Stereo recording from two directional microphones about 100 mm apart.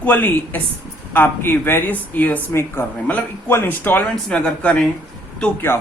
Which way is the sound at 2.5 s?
25° left (ahead or behind).